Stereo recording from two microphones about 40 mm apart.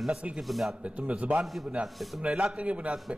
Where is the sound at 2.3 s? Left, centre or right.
Centre.